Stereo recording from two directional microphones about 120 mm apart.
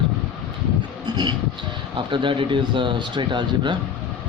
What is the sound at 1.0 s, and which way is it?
Vehicle, 40° right (ahead or behind).